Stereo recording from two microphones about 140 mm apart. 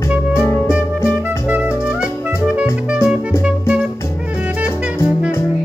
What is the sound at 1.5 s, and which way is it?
Music, 5° right (ahead or behind).